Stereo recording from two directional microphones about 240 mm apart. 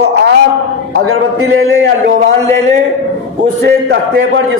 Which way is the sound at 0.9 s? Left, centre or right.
Right.